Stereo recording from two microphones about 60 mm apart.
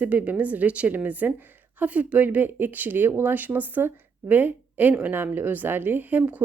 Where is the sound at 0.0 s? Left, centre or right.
Right.